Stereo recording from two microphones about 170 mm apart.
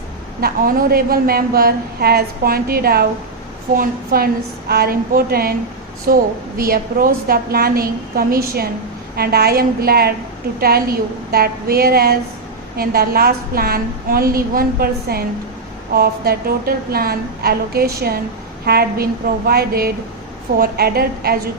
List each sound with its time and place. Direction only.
0.4 s a woman's voice: 60° right (ahead or behind)